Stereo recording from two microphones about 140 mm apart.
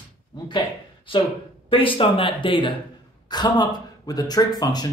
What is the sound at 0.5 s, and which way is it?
Speech, 35° left (ahead or behind).